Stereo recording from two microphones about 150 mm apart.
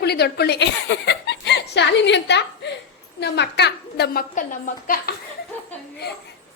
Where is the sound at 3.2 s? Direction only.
90° left; by 5.1 s 75° left (ahead or behind).